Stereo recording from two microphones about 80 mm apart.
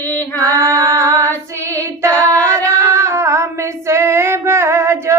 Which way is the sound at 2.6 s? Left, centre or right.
Right.